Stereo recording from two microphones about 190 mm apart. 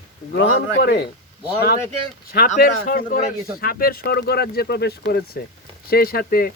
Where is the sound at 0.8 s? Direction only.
60° left (ahead or behind).